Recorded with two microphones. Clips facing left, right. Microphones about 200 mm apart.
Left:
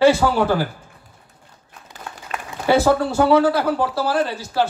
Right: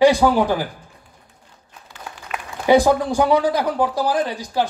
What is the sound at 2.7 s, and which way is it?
A man's voice, 15° right (ahead or behind).